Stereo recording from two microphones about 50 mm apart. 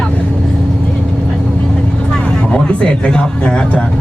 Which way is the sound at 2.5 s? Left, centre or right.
Left.